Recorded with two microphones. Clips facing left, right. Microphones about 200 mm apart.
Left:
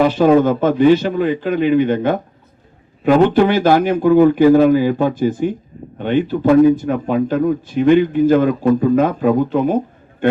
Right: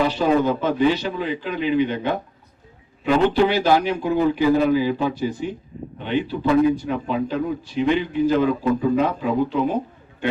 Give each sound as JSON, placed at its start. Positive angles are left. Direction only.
{"t": 0.0, "sound": "a man's voice", "side_deg": 50}